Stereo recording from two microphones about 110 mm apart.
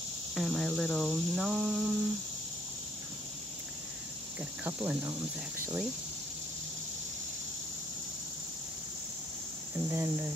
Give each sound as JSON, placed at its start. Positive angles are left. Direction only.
{"t": 0.3, "sound": "a sound", "side_deg": 0}
{"t": 4.6, "sound": "cricket", "side_deg": -15}
{"t": 9.8, "sound": "speech", "side_deg": -25}